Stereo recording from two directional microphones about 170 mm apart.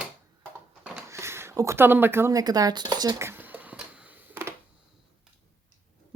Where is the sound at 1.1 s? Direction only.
15° right (ahead or behind).